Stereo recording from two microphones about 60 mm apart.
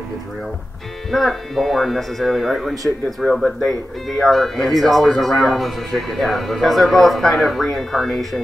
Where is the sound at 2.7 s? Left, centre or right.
Right.